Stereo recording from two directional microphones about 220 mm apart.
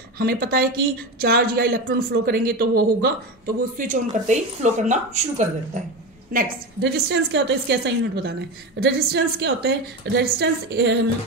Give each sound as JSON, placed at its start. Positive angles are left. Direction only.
{"t": 0.2, "sound": "speech", "side_deg": -45}
{"t": 6.3, "sound": "speech", "side_deg": -50}